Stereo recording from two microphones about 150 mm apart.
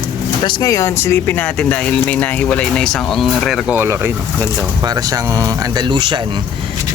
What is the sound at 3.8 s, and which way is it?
Speech, 15° right (ahead or behind).